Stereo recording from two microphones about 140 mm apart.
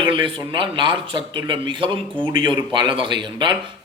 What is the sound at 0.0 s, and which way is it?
A man's voice, 35° right (ahead or behind).